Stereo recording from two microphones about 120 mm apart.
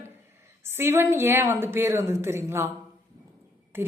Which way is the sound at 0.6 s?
20° right (ahead or behind).